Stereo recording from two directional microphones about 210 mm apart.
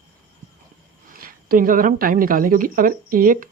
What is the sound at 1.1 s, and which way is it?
Speech, 40° right (ahead or behind).